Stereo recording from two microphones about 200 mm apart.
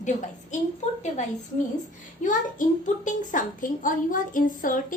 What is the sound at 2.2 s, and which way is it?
A child's voice, 40° left (ahead or behind).